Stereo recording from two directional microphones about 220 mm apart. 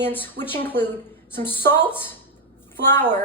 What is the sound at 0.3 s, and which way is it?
Speech, 25° left (ahead or behind).